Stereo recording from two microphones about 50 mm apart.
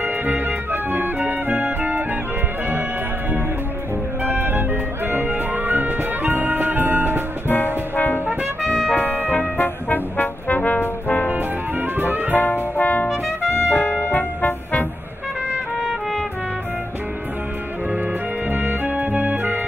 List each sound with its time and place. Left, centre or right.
0.0 s organ: right
4.2 s music: right
7.4 s music: left
8.9 s trumpet: left
9.3 s music: left
10.8 s brass instrument: left
12.0 s music: right
12.4 s music: left
18.5 s organ: right